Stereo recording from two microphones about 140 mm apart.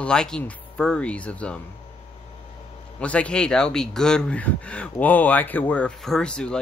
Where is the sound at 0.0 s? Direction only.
5° left (ahead or behind).